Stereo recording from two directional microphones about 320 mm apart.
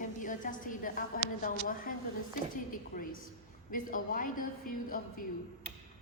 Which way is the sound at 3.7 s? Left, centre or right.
Left.